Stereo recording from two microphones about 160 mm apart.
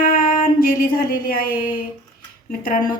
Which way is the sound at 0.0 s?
60° left (ahead or behind).